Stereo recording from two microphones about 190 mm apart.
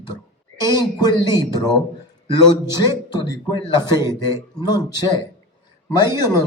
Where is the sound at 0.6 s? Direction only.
20° left (ahead or behind).